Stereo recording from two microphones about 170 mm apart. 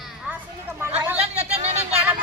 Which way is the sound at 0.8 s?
10° right (ahead or behind).